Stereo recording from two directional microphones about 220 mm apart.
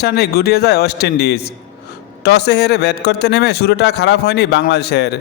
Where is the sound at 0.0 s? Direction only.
45° left (ahead or behind).